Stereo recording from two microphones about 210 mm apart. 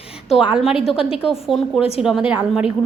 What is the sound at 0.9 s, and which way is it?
Speech, 25° left (ahead or behind).